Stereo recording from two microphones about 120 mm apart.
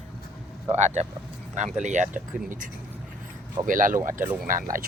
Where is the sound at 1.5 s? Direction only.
85° right.